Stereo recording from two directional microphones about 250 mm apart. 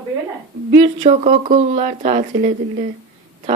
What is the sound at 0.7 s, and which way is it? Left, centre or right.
Speech, right.